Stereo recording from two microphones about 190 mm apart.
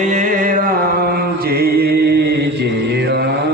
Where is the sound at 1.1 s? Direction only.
55° right (ahead or behind).